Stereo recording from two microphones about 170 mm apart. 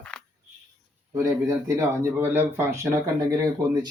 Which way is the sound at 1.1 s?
15° right (ahead or behind).